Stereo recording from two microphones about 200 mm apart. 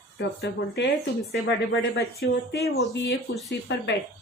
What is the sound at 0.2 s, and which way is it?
A woman's voice, 60° left (ahead or behind).